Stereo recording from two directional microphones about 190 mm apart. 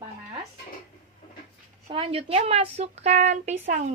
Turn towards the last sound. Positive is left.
turn(degrees=-40)  # may be behind; listen again after turning